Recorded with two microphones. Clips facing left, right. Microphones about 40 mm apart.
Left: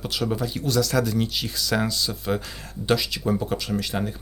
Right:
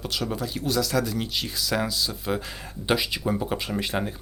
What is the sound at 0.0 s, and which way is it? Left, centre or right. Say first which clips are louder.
Speech: left 3 dB; centre.